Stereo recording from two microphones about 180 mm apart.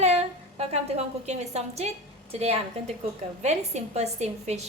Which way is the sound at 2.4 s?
35° right (ahead or behind).